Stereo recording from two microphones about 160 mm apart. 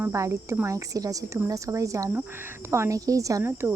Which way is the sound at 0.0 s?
15° right (ahead or behind).